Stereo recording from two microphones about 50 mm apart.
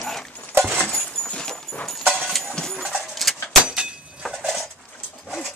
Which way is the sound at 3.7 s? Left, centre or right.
Right.